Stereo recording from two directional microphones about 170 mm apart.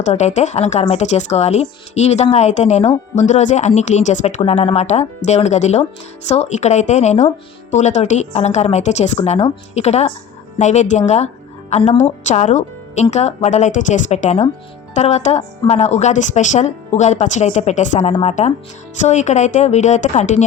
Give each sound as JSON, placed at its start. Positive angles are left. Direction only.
{"t": 0.0, "sound": "a woman's voice", "side_deg": 45}